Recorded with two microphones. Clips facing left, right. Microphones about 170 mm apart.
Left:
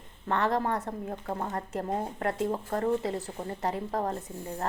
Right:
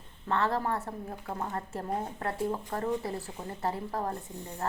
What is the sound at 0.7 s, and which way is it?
Speech, 40° left (ahead or behind).